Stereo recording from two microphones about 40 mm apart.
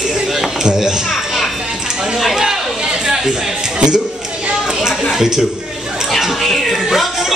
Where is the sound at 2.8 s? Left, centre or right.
Centre.